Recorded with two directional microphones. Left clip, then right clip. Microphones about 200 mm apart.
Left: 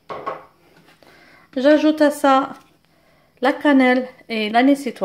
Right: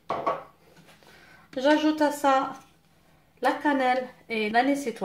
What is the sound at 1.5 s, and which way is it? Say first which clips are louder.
A woman's voice: left 8 dB; 35° left (ahead or behind).